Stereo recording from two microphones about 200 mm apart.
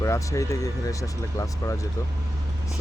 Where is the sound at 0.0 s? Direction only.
15° left (ahead or behind).